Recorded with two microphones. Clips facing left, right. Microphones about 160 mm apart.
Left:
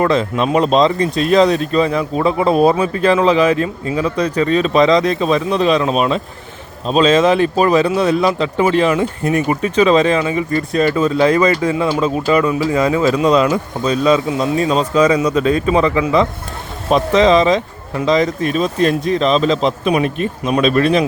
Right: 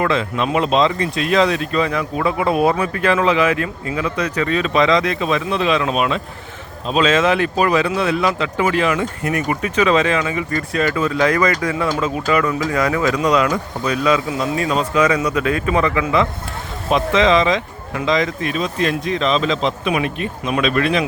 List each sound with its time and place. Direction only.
0.0 s speech: 40° left (ahead or behind)